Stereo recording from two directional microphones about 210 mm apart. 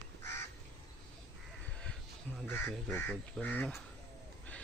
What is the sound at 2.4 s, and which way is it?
Speech, 10° left (ahead or behind).